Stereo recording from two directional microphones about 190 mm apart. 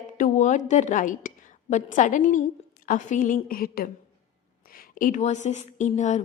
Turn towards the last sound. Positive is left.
turn(degrees=40)  # may be behind; listen again after turning